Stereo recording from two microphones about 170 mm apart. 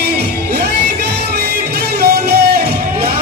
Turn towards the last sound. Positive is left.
turn(degrees=-65)  # may be behind; listen again after turning